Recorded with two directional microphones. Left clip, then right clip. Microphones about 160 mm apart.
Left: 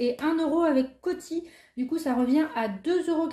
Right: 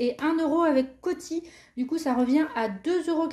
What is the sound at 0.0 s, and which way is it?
A woman's voice, 20° right (ahead or behind).